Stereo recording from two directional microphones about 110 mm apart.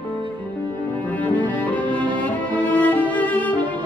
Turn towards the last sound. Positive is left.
turn(degrees=15)  # may be behind; listen again after turning